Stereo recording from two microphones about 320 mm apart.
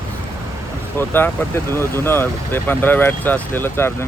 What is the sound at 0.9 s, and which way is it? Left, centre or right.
Speech, centre.